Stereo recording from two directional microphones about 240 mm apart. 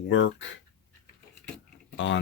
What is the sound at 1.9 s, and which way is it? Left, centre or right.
Speech, left.